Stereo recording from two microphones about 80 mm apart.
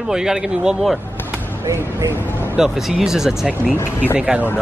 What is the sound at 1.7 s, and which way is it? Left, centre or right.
Speech, right.